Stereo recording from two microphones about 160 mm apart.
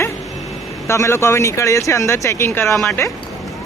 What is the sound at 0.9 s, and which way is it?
Speech, 20° left (ahead or behind).